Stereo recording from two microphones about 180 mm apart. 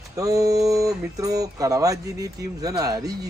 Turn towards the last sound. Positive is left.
turn(degrees=-20)  # may be behind; listen again after turning